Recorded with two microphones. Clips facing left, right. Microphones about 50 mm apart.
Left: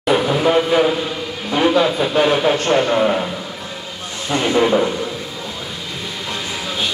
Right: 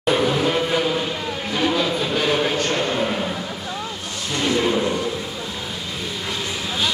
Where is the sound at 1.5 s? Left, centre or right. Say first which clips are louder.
Left 6 dB; left.